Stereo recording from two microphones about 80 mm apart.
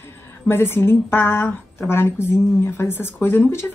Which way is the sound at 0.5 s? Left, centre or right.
Left.